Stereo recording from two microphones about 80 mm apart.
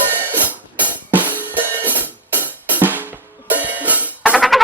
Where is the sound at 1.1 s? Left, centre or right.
Right.